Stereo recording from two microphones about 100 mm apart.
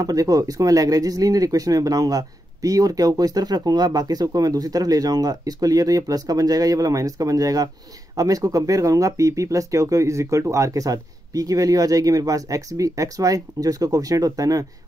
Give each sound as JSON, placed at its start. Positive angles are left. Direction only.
{"t": 0.0, "sound": "speech", "side_deg": -40}